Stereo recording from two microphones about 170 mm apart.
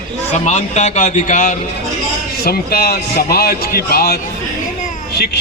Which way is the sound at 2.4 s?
65° left (ahead or behind).